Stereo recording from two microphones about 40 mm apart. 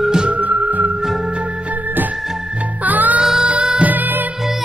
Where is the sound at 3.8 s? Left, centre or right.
Right.